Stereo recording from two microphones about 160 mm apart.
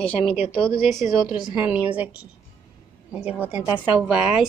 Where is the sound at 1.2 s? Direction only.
25° left (ahead or behind).